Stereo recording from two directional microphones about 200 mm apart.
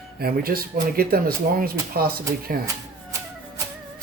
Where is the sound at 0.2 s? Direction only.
50° right (ahead or behind).